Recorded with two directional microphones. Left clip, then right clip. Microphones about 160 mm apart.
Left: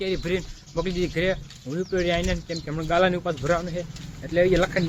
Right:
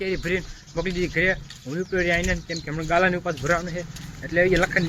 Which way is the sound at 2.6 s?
15° left (ahead or behind).